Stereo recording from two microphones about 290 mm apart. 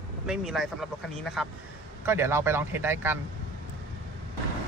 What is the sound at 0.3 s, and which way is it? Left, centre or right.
Speech, centre.